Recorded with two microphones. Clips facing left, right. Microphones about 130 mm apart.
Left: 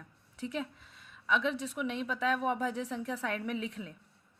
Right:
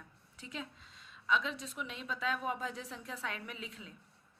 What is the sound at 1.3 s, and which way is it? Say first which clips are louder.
Speech: left 6 dB; 65° left (ahead or behind).